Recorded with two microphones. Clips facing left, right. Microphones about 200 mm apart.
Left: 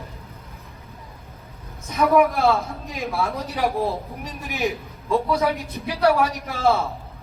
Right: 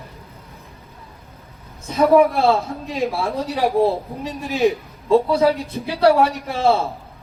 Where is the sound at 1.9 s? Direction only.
30° right (ahead or behind).